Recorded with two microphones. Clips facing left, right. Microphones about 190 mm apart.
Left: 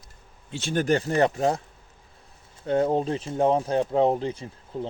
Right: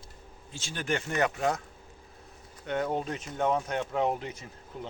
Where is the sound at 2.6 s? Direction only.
30° left (ahead or behind).